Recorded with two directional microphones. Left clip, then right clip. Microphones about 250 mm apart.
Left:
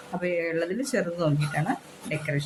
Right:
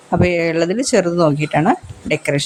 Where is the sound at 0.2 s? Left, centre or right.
Right.